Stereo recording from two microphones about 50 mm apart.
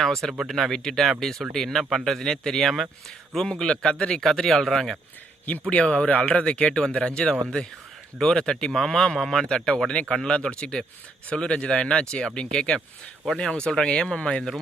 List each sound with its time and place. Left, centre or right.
0.0 s speech: centre
5.6 s speech: centre